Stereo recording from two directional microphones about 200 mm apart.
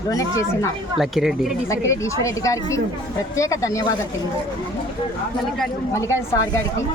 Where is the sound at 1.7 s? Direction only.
15° left (ahead or behind).